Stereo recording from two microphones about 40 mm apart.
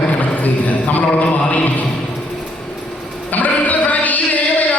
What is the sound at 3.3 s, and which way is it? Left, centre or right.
Music, left.